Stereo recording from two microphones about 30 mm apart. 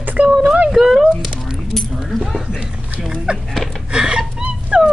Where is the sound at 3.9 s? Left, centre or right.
Right.